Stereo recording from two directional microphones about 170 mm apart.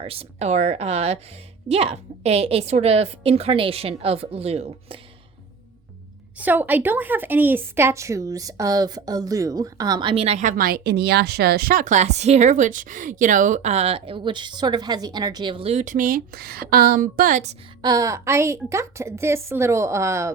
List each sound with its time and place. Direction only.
0.0 s a woman's voice: 35° right (ahead or behind)
6.3 s a woman's voice: 10° right (ahead or behind); by 10.5 s 40° right (ahead or behind)
10.6 s speech: 60° right (ahead or behind); by 17.6 s 45° right (ahead or behind)
17.8 s a woman's voice: 20° right (ahead or behind)